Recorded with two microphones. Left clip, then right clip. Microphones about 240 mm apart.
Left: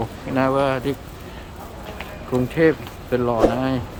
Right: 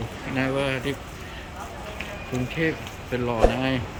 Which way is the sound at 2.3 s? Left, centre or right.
Left.